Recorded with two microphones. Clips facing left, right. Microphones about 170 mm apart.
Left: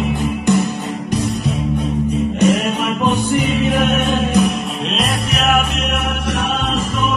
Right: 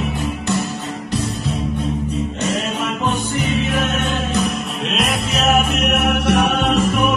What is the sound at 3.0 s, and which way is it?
Music, 15° left (ahead or behind).